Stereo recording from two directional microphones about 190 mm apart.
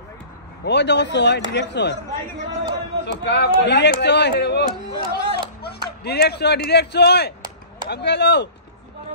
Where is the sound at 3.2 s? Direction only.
65° left (ahead or behind).